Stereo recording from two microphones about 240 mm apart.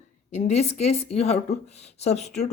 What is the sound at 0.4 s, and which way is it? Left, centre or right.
A woman's voice, left.